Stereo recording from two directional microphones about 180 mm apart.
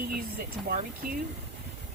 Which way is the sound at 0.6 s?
55° right (ahead or behind).